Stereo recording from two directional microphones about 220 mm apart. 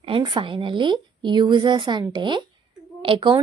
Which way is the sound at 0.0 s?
25° right (ahead or behind).